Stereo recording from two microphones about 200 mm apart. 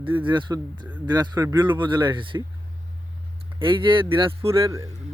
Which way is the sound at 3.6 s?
25° right (ahead or behind).